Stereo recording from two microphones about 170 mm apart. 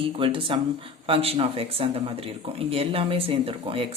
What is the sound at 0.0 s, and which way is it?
Speech, 30° right (ahead or behind).